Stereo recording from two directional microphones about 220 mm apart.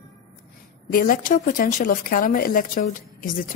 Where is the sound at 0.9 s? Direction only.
40° left (ahead or behind).